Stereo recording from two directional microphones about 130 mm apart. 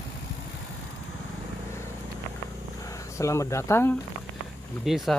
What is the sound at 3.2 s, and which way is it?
Speech, 25° left (ahead or behind).